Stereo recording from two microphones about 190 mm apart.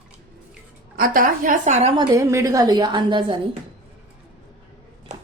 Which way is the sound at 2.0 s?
15° right (ahead or behind).